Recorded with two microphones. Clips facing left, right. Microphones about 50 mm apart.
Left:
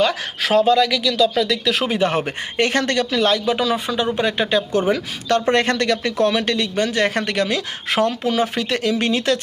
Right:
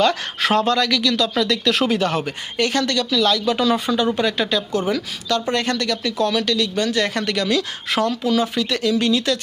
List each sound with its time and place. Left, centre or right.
0.0 s speech: centre
1.9 s speech: left
3.5 s speech: centre; by 9.4 s left